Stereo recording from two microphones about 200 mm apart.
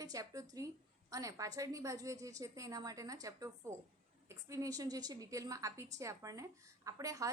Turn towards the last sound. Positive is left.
turn(degrees=-15)  # may be behind; listen again after turning